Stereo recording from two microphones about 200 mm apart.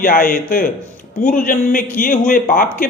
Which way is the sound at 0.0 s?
45° left (ahead or behind).